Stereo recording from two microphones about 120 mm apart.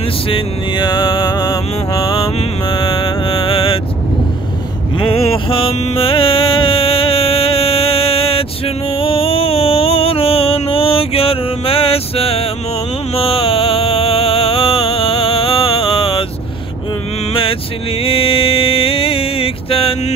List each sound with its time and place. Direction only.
0.3 s music: 40° left (ahead or behind)
4.9 s mantra: 50° left (ahead or behind)
13.1 s music: 55° left (ahead or behind)
17.3 s vehicle: 50° left (ahead or behind)
18.0 s mantra: 50° left (ahead or behind)